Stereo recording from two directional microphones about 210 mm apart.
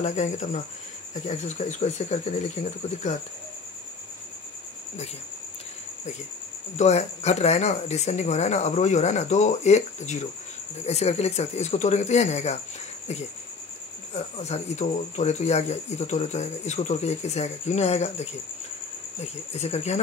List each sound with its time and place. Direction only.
0.0 s speech: 35° left (ahead or behind)
6.8 s speech: 30° left (ahead or behind)
14.1 s speech: 30° left (ahead or behind)
19.5 s speech: 30° left (ahead or behind)